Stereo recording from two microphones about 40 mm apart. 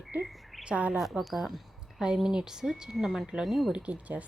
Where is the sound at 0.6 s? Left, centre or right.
Right.